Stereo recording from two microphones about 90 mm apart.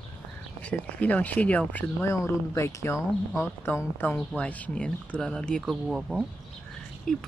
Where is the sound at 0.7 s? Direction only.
15° left (ahead or behind).